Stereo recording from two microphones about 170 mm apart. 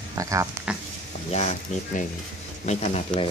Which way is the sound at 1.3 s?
45° left (ahead or behind).